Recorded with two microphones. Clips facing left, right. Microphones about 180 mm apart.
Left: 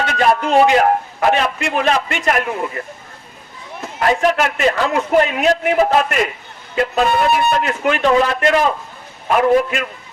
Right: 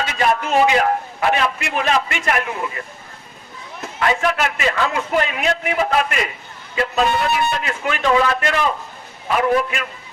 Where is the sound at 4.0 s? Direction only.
40° left (ahead or behind).